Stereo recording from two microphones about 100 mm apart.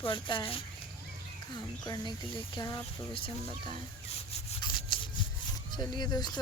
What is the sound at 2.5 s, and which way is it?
Speech, 40° left (ahead or behind).